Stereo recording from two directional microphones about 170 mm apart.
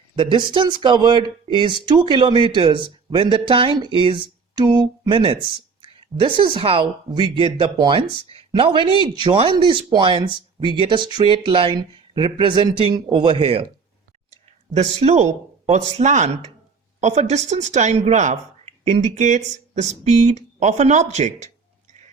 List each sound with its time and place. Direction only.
0.2 s speech: 30° right (ahead or behind)
14.3 s clicking: 40° right (ahead or behind)
14.9 s speech: 40° right (ahead or behind)